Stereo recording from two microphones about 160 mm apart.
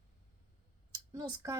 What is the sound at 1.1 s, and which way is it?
Speech, 20° right (ahead or behind).